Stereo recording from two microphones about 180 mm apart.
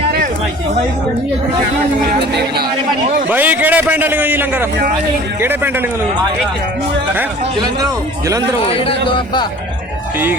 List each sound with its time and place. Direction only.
2.0 s speech: 60° right (ahead or behind)
3.2 s a man's voice: 10° right (ahead or behind)
8.6 s speech: 30° left (ahead or behind)